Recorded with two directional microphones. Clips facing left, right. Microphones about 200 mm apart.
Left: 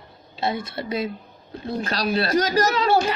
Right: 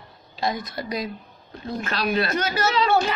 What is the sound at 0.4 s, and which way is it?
A woman's voice, 30° left (ahead or behind).